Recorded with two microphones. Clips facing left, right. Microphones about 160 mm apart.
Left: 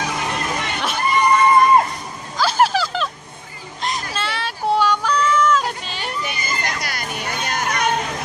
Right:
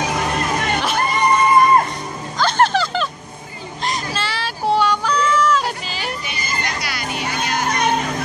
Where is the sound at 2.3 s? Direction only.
5° left (ahead or behind).